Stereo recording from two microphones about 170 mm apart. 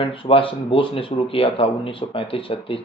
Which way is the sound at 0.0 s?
30° left (ahead or behind).